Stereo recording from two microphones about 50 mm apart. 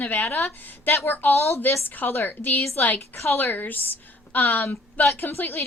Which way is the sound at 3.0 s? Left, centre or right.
Left.